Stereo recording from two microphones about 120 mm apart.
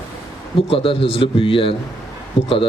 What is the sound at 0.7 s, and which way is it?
A man's voice, 50° left (ahead or behind).